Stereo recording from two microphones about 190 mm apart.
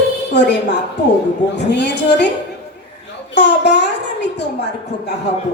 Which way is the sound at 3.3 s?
65° left (ahead or behind).